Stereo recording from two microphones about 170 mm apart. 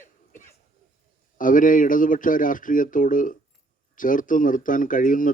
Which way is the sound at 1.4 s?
50° left (ahead or behind).